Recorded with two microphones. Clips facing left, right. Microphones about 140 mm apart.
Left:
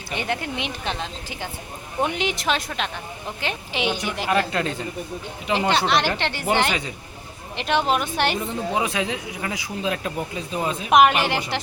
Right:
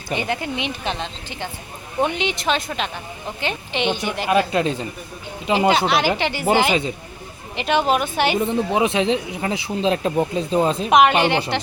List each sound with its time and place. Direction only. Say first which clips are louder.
0.1 s speech: right 3 dB; centre (ahead or behind)
4.5 s speech: right 5 dB; 20° right (ahead or behind)
5.5 s speech: right 3 dB; 5° right (ahead or behind)
8.4 s speech: right 6 dB; 20° right (ahead or behind)
10.9 s speech: right 1 dB; centre (ahead or behind)